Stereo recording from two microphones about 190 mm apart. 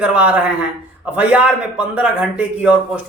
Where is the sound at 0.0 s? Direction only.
5° right (ahead or behind).